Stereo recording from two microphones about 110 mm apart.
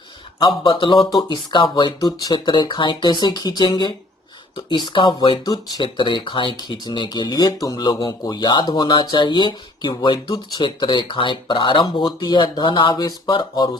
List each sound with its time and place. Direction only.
0.3 s speech: 45° left (ahead or behind)
5.5 s speech: 40° left (ahead or behind)